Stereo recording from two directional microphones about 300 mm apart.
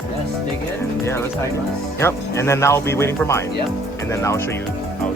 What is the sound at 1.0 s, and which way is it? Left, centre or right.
Speech, centre.